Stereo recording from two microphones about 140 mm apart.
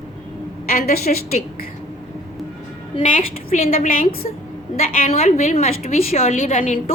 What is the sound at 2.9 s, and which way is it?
Speech, 45° left (ahead or behind).